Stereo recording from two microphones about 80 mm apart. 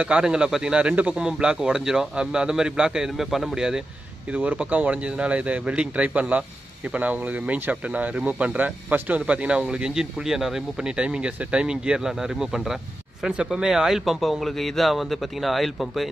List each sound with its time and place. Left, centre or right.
0.0 s speech: centre